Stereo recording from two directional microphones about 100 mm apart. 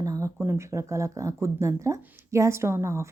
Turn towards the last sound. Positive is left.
turn(degrees=-30)  # may be behind; listen again after turning